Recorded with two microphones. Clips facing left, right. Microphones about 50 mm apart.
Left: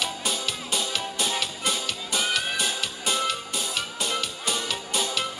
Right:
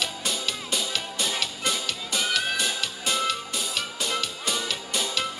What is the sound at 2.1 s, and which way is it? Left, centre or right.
Music, centre.